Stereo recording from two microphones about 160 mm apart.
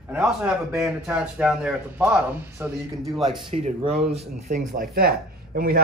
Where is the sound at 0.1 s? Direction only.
5° right (ahead or behind).